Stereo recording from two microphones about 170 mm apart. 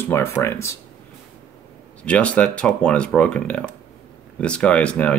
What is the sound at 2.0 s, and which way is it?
Speech, 10° left (ahead or behind).